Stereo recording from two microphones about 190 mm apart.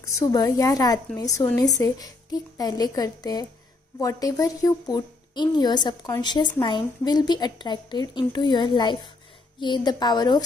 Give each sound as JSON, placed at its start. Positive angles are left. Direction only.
{"t": 0.2, "sound": "a woman's voice", "side_deg": 20}